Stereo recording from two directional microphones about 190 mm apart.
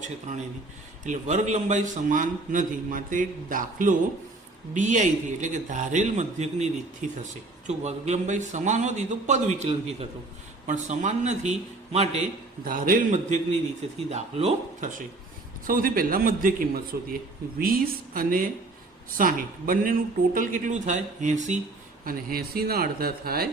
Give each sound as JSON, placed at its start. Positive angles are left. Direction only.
{"t": 0.0, "sound": "a man's voice", "side_deg": -40}
{"t": 12.6, "sound": "a man's voice", "side_deg": -50}
{"t": 15.6, "sound": "a man's voice", "side_deg": -50}
{"t": 22.0, "sound": "a man's voice", "side_deg": -50}